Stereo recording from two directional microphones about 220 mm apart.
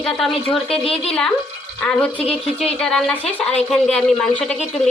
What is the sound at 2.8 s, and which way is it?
Speech, 5° left (ahead or behind).